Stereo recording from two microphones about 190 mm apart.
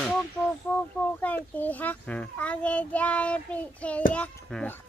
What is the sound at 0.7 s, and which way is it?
A child's voice, 10° left (ahead or behind).